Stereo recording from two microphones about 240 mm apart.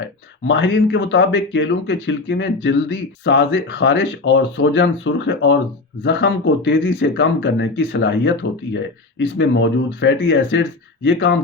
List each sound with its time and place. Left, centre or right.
0.4 s speech: left